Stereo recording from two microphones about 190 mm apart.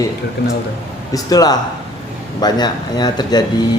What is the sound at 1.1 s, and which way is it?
Speech, 20° left (ahead or behind).